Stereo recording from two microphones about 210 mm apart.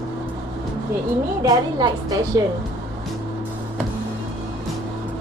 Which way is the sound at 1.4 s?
20° right (ahead or behind).